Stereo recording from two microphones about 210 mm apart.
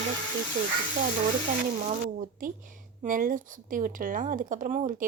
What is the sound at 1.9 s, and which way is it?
Speech, 40° right (ahead or behind).